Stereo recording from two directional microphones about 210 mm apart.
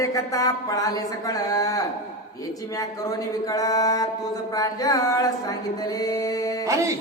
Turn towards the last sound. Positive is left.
turn(degrees=-15)  # may be behind; listen again after turning